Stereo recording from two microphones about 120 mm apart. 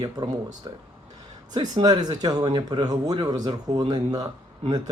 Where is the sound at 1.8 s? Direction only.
35° right (ahead or behind).